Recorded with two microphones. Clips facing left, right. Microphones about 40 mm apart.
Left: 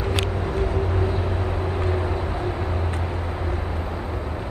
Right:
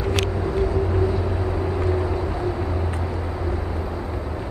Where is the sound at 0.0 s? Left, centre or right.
Left.